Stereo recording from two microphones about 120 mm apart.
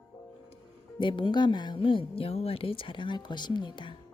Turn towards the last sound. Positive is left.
turn(degrees=40)  # may be behind; listen again after turning